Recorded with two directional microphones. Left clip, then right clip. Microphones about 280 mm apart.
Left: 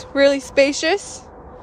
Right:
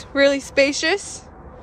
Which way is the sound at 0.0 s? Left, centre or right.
Centre.